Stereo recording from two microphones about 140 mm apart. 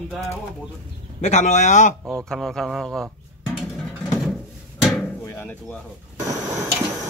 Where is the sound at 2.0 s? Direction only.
20° right (ahead or behind).